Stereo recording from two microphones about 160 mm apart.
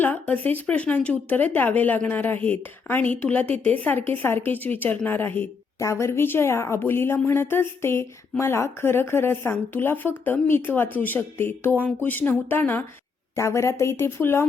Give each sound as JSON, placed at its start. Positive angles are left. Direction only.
{"t": 0.0, "sound": "speech", "side_deg": 10}